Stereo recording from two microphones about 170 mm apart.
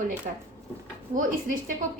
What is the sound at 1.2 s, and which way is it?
Speech, 50° right (ahead or behind).